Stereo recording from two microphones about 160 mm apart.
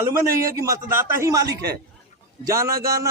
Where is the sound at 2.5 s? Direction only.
20° right (ahead or behind).